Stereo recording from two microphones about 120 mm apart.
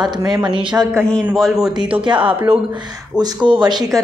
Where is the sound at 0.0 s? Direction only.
35° right (ahead or behind).